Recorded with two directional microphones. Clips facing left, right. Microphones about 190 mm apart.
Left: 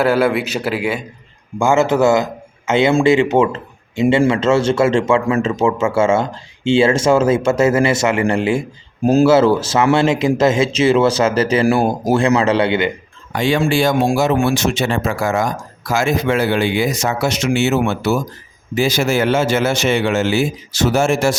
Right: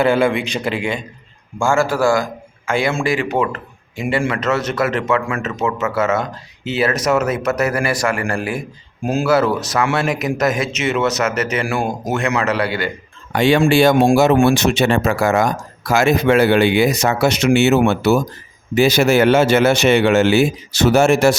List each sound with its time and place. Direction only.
0.0 s a man's voice: 5° left (ahead or behind)
1.5 s a man's voice: 20° left (ahead or behind)
13.3 s speech: 65° right (ahead or behind)